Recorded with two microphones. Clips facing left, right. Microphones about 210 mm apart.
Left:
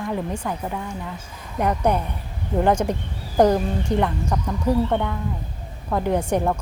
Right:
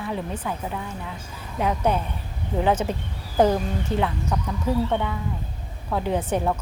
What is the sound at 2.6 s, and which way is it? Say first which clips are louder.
Speech: left 3 dB; 10° left (ahead or behind).